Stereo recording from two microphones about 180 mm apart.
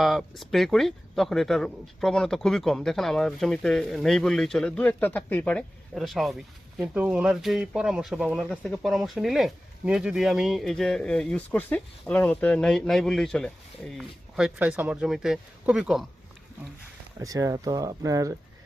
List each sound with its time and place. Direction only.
0.0 s speech: centre (ahead or behind)
17.2 s speech: 20° right (ahead or behind)